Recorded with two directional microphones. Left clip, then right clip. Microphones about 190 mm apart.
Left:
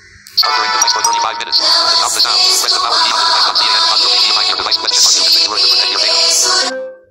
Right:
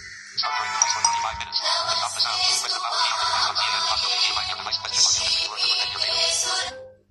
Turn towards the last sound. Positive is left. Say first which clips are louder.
# left 12 dB
turn(degrees=50)  # may be behind; listen again after turning